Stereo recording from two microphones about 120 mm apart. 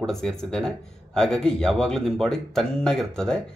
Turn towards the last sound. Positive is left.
turn(degrees=5)  # may be behind; listen again after turning